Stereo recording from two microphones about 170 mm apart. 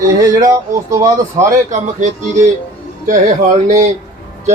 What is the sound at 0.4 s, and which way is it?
Speech, 20° right (ahead or behind).